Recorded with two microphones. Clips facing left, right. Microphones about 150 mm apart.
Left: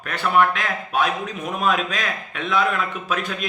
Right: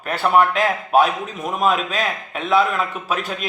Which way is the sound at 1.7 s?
45° left (ahead or behind).